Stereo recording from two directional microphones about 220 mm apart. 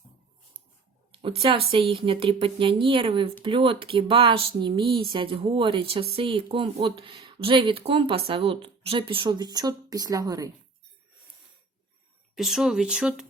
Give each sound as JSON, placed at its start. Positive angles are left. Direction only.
{"t": 1.4, "sound": "speech", "side_deg": -25}
{"t": 12.3, "sound": "speech", "side_deg": 0}